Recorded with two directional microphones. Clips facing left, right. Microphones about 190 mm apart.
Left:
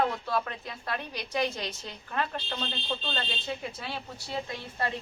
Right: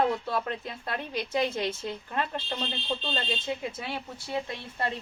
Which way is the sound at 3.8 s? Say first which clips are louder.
Right 2 dB; 20° right (ahead or behind).